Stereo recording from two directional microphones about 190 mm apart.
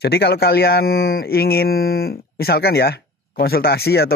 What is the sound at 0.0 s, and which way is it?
Speech, 55° left (ahead or behind).